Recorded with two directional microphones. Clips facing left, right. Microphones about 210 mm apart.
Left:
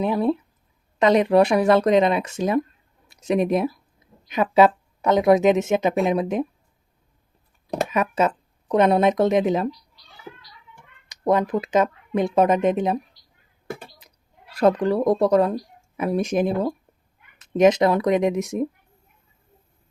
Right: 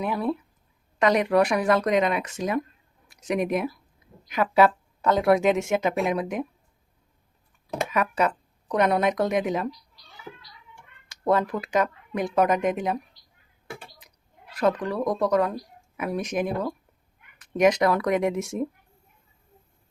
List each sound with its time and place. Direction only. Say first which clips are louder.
0.0 s speech: left 5 dB; 25° left (ahead or behind)
7.9 s speech: left 2 dB; 20° left (ahead or behind)
11.1 s speech: left 3 dB; 20° left (ahead or behind)
13.7 s a sound: left 6 dB; 40° left (ahead or behind)
14.5 s speech: left 6 dB; 30° left (ahead or behind)